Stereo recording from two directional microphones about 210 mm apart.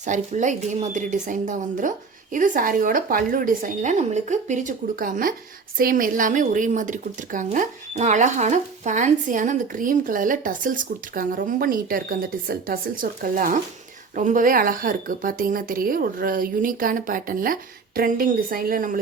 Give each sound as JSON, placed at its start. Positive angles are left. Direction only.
{"t": 0.0, "sound": "speech", "side_deg": -35}